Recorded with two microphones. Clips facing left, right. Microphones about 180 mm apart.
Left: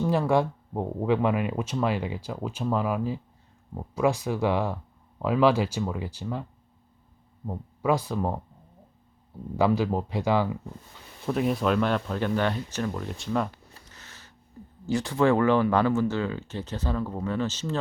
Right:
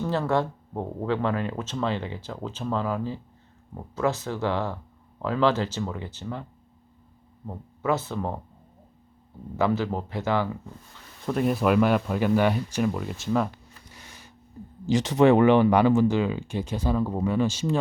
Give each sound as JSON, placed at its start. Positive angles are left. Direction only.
{"t": 0.0, "sound": "speech", "side_deg": 10}
{"t": 7.4, "sound": "speech", "side_deg": 15}
{"t": 9.6, "sound": "speech", "side_deg": 15}
{"t": 11.3, "sound": "speech", "side_deg": 0}
{"t": 13.9, "sound": "a sound", "side_deg": -15}
{"t": 14.8, "sound": "speech", "side_deg": -20}